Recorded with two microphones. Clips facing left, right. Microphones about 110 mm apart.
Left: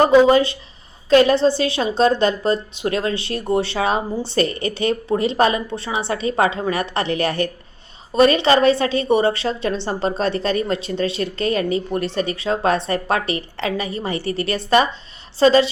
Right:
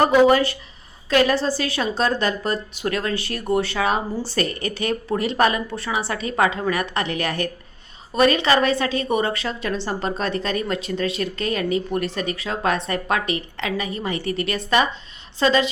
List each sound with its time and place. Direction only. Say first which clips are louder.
0.0 s speech: left 3 dB; 25° left (ahead or behind)